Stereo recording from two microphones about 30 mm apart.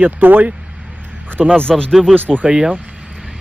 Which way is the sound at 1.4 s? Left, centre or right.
Centre.